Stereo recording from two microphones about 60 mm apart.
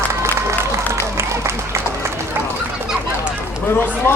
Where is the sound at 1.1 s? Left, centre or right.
Right.